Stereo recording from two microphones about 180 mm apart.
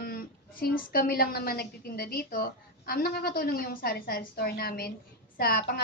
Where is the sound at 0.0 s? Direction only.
55° left (ahead or behind).